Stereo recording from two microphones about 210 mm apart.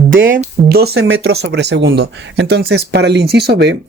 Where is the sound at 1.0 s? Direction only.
70° right (ahead or behind).